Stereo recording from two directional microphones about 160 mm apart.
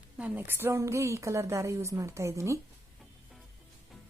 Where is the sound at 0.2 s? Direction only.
10° right (ahead or behind).